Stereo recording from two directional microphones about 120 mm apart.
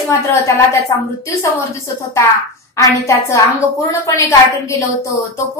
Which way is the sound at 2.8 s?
25° left (ahead or behind).